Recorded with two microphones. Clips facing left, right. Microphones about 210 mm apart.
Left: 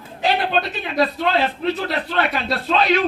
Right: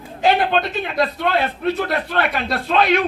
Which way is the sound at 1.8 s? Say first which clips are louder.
Right 1 dB; 55° right (ahead or behind).